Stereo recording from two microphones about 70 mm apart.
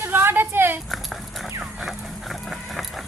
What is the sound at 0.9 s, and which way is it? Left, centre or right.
Dog, centre.